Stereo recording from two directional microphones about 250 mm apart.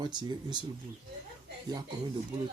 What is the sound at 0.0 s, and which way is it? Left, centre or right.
Speech, centre.